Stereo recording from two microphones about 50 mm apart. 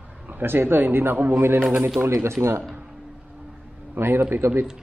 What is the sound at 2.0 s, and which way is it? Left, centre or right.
Speech, right.